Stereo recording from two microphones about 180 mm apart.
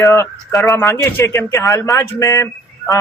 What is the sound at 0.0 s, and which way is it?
Speech, 15° left (ahead or behind).